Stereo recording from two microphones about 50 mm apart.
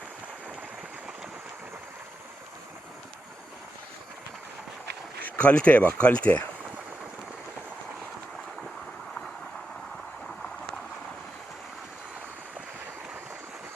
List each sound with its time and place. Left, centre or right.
5.2 s speech: left